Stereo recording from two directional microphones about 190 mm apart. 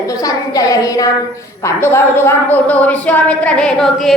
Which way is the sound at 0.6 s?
20° left (ahead or behind).